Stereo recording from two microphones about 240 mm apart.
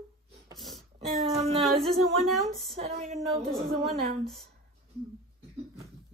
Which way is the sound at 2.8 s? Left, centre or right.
Right.